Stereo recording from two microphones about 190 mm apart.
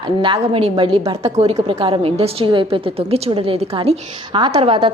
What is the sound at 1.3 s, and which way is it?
A woman's voice, 35° right (ahead or behind).